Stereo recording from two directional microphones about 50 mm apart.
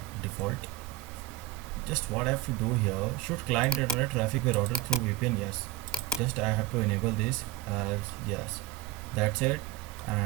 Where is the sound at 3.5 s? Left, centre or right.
Centre.